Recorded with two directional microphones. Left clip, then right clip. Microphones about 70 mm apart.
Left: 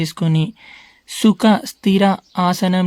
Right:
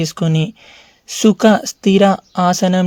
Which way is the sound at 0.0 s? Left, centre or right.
Right.